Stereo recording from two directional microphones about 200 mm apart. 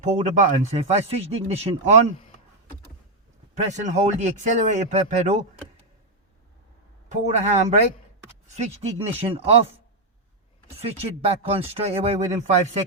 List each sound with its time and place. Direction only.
0.0 s speech: 35° right (ahead or behind)
3.5 s speech: 35° right (ahead or behind)
7.1 s speech: 35° right (ahead or behind)
10.8 s speech: 30° right (ahead or behind)